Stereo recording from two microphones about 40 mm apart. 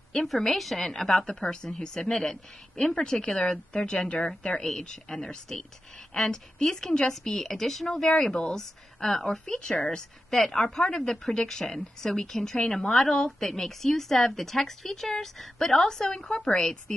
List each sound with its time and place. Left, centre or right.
0.1 s a woman's voice: centre
16.3 s speech: left
16.5 s a woman's voice: centre